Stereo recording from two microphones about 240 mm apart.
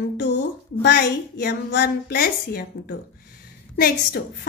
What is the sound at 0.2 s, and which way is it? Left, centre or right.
A woman's voice, left.